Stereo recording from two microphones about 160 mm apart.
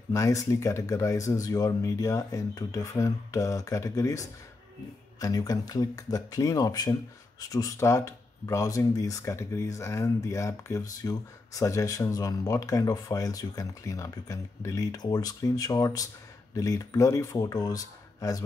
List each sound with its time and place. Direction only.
0.1 s speech: 20° left (ahead or behind)